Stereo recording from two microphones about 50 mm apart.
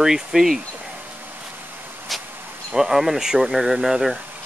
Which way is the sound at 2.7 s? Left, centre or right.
Centre.